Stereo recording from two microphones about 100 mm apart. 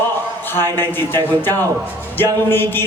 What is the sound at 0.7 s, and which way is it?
Speech, 20° left (ahead or behind).